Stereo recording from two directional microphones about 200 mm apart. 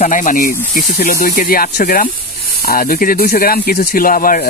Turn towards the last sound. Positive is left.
turn(degrees=45)  # may be behind; listen again after turning